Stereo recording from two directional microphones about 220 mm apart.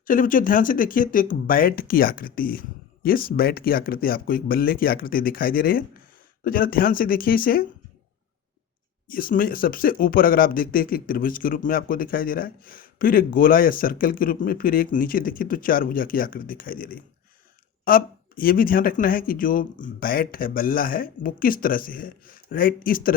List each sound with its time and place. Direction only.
0.0 s speech: 40° left (ahead or behind)
9.0 s speech: 40° left (ahead or behind)